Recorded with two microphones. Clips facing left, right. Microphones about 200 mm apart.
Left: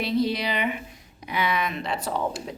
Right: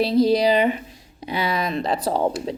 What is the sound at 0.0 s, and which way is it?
Speech, 35° right (ahead or behind).